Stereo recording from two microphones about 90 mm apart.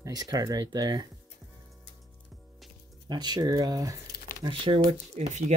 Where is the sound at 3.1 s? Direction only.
50° right (ahead or behind).